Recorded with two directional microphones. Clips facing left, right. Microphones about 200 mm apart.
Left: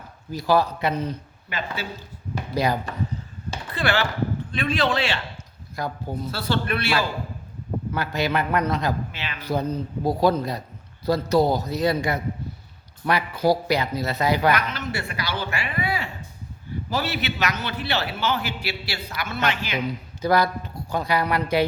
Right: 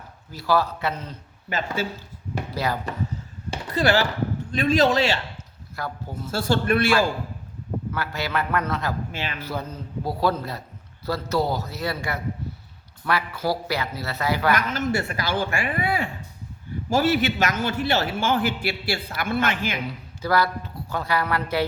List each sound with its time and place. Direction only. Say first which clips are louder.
0.3 s speech: left 2 dB; 15° left (ahead or behind)
1.5 s a man's voice: right 4 dB; 45° right (ahead or behind)
2.5 s speech: left 4 dB; 15° left (ahead or behind)
3.5 s chop: right 4 dB; 40° right (ahead or behind)
4.5 s a man's voice: right 6 dB; 40° right (ahead or behind)
5.7 s speech: left 3 dB; 15° left (ahead or behind)
6.3 s a man's voice: right 5 dB; 45° right (ahead or behind)
7.9 s speech: left 4 dB; 20° left (ahead or behind)
9.1 s a man's voice: right 4 dB; 45° right (ahead or behind)
9.4 s speech: left 6 dB; 15° left (ahead or behind)
14.5 s a man's voice: right 3 dB; 45° right (ahead or behind)
19.9 s speech: left 5 dB; 15° left (ahead or behind)